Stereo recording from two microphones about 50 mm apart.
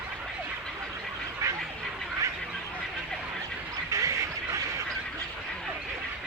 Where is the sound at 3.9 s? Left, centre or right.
Right.